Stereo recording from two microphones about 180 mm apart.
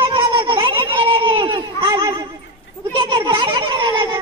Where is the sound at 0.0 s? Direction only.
25° right (ahead or behind).